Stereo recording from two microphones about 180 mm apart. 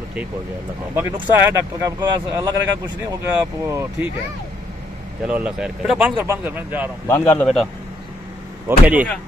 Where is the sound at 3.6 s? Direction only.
15° right (ahead or behind).